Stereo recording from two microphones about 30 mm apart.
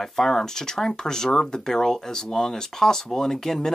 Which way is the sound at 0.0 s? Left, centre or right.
Centre.